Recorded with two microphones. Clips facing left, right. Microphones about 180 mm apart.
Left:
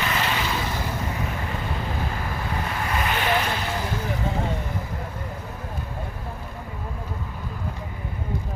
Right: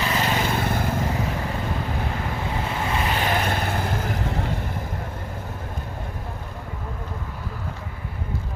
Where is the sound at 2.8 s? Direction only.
25° right (ahead or behind); by 4.0 s 55° right (ahead or behind).